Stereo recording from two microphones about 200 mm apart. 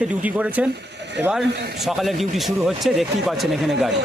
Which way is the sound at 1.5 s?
55° right (ahead or behind).